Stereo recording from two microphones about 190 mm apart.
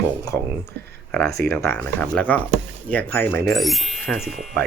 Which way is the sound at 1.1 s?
Centre (ahead or behind).